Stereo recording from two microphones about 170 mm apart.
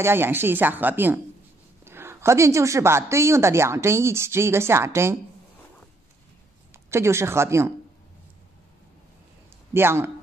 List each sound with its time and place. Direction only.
0.0 s a woman's voice: 15° right (ahead or behind)
6.7 s speech: 15° right (ahead or behind)
9.8 s a woman's voice: 15° right (ahead or behind)